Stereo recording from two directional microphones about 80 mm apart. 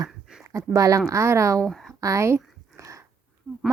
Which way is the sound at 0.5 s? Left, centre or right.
Right.